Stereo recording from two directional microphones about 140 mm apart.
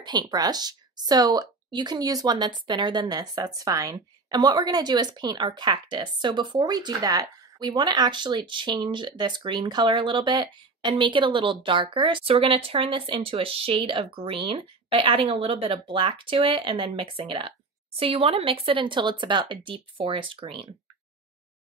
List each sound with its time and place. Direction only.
0.0 s speech: 30° right (ahead or behind)